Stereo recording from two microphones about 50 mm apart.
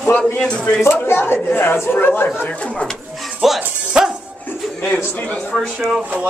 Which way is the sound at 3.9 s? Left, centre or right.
Centre.